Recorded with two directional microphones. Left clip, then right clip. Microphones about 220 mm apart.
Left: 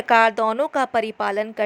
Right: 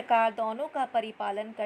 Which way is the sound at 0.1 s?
30° left (ahead or behind).